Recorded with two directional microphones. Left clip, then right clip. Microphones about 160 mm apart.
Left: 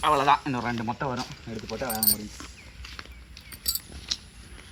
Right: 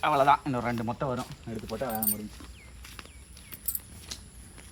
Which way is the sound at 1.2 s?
5° right (ahead or behind).